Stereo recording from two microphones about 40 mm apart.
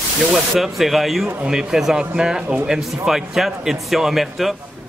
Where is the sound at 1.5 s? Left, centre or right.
Centre.